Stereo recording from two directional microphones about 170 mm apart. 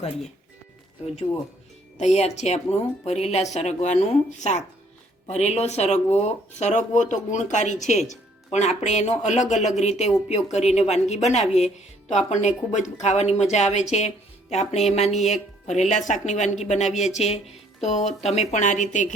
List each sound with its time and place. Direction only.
2.0 s speech: 40° left (ahead or behind)